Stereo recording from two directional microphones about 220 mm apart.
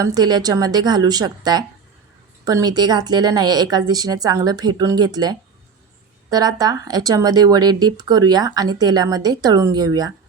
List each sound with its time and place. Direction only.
0.0 s speech: 15° right (ahead or behind)